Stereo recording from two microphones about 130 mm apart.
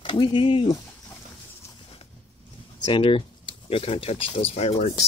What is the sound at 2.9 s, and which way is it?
Speech, 45° left (ahead or behind).